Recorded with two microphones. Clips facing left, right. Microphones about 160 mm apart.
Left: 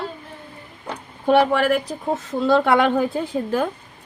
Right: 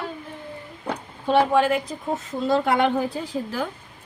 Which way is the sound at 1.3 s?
70° left (ahead or behind).